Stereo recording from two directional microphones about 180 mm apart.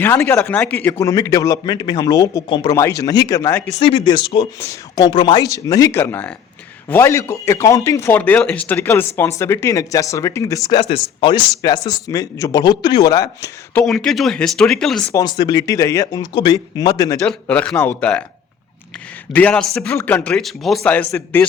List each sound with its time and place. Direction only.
0.0 s a man's voice: 10° left (ahead or behind)
3.8 s a man's voice: 30° left (ahead or behind)
10.7 s a man's voice: 30° left (ahead or behind)
13.8 s speech: centre (ahead or behind)
15.1 s a man's voice: 20° left (ahead or behind)
17.4 s a man's voice: 5° left (ahead or behind)
19.3 s a man's voice: 10° left (ahead or behind)